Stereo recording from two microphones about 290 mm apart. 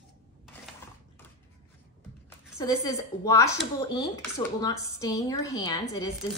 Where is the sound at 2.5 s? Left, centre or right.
Centre.